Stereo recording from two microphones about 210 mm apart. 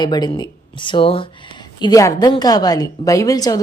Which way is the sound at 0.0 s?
20° left (ahead or behind).